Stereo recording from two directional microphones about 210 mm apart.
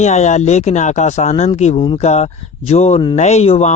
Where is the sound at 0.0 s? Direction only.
35° left (ahead or behind).